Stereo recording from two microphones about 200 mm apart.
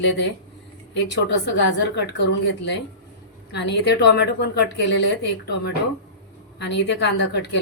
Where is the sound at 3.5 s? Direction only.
55° left (ahead or behind).